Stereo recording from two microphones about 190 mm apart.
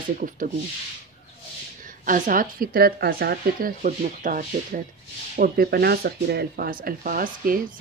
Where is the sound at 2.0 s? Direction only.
45° right (ahead or behind).